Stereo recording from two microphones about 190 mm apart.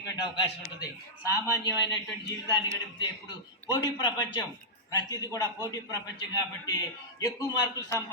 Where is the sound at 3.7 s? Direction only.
25° left (ahead or behind).